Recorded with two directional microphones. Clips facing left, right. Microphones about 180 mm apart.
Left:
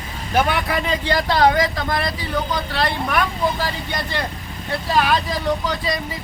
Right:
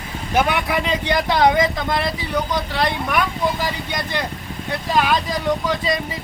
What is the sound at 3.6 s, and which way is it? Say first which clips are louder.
Speech: even; 15° right (ahead or behind).